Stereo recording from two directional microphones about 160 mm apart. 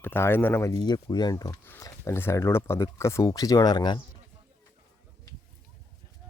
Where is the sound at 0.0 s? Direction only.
15° left (ahead or behind).